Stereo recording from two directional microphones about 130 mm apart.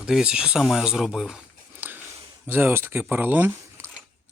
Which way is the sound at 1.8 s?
15° right (ahead or behind).